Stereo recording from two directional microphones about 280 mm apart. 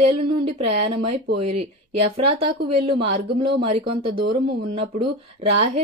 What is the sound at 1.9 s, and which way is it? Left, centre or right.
Speech, right.